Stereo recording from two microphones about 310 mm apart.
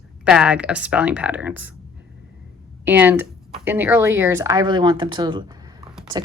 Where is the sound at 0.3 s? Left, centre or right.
Centre.